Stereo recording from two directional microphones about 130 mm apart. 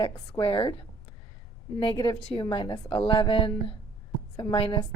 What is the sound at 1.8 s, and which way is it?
A woman's voice, 40° left (ahead or behind).